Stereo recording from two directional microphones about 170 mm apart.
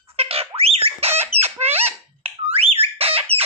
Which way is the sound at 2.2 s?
35° right (ahead or behind).